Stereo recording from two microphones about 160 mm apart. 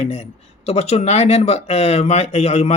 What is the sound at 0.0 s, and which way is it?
Speech, 40° left (ahead or behind).